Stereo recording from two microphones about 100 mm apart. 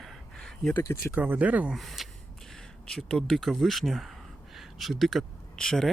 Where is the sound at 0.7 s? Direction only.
25° left (ahead or behind).